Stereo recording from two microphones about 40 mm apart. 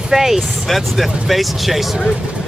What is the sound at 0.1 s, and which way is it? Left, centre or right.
Speech, centre.